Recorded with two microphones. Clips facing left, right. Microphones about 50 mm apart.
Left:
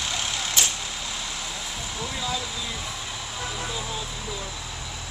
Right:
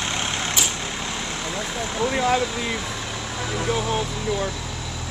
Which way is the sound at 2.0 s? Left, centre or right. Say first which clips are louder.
Right 11 dB; right.